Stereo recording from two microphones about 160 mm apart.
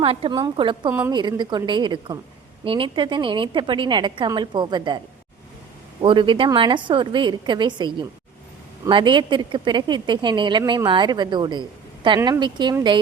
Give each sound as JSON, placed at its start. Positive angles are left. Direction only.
{"t": 0.0, "sound": "a woman's voice", "side_deg": -35}
{"t": 0.9, "sound": "a woman's voice", "side_deg": -15}
{"t": 1.1, "sound": "a woman's voice", "side_deg": -25}
{"t": 6.0, "sound": "a woman's voice", "side_deg": -30}